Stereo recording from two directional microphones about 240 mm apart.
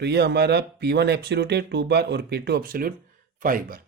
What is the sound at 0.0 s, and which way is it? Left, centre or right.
Speech, right.